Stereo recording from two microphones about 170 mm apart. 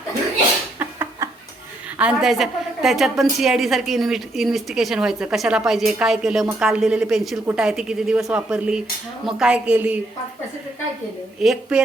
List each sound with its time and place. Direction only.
0.8 s a sound: 20° right (ahead or behind)
2.0 s a woman's voice: 5° right (ahead or behind)
11.3 s a woman's voice: 5° right (ahead or behind)